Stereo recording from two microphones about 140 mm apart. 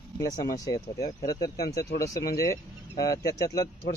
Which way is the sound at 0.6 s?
25° left (ahead or behind).